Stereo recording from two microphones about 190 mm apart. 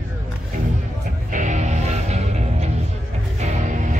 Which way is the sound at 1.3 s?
40° right (ahead or behind).